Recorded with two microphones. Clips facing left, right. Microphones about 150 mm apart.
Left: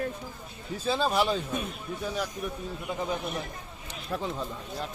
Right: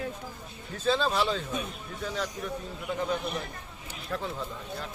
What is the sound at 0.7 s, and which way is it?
Speech, 10° left (ahead or behind).